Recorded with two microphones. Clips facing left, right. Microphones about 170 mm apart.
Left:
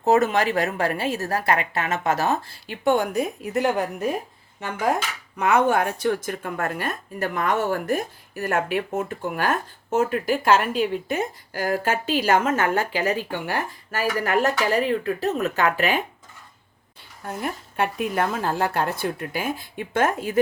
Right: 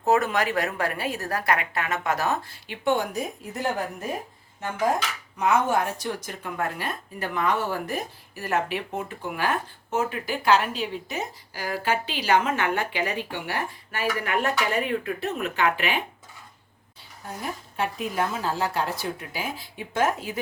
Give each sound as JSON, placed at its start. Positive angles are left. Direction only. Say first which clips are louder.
{"t": 0.0, "sound": "a woman's voice", "louder": "left 3 dB", "side_deg": 25}
{"t": 2.6, "sound": "speech", "louder": "left 4 dB", "side_deg": 50}
{"t": 5.4, "sound": "a woman's voice", "louder": "left 3 dB", "side_deg": 65}
{"t": 17.4, "sound": "speech", "louder": "left 3 dB", "side_deg": 60}